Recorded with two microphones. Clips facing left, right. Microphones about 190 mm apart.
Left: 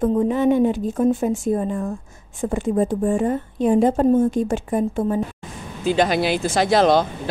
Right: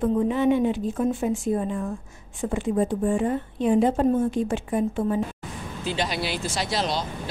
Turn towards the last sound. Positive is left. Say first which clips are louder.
# left 11 dB
turn(degrees=55)  # may be behind; listen again after turning